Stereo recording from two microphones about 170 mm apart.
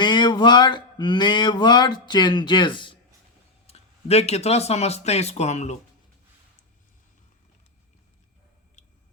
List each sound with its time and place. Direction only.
0.0 s speech: 25° left (ahead or behind)
3.7 s speech: 40° left (ahead or behind)